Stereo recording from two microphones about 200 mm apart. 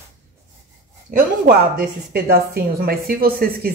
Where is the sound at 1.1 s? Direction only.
50° right (ahead or behind).